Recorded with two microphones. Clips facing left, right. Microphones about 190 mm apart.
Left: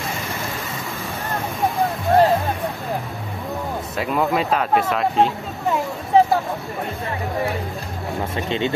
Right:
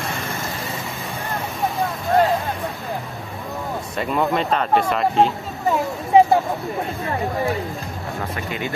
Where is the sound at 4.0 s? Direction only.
5° left (ahead or behind).